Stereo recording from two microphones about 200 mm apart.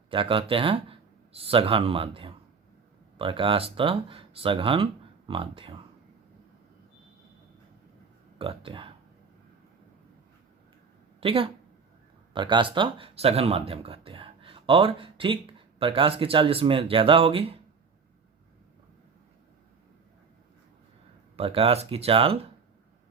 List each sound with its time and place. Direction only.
0.1 s speech: 25° right (ahead or behind)
8.4 s speech: 25° right (ahead or behind)
11.2 s speech: 25° right (ahead or behind)
21.3 s speech: 30° right (ahead or behind)